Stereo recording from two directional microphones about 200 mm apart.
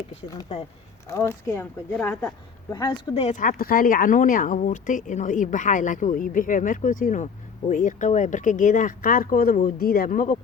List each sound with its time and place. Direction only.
1.0 s speech: 15° left (ahead or behind)
3.2 s speech: 40° left (ahead or behind)